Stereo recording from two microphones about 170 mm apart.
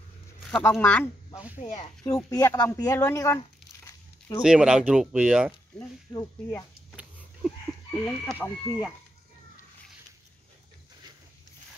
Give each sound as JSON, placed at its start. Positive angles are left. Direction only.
{"t": 0.5, "sound": "speech", "side_deg": 10}
{"t": 1.6, "sound": "speech", "side_deg": 45}
{"t": 2.0, "sound": "speech", "side_deg": 20}
{"t": 4.4, "sound": "speech", "side_deg": -5}
{"t": 5.8, "sound": "speech", "side_deg": 10}
{"t": 8.3, "sound": "speech", "side_deg": -5}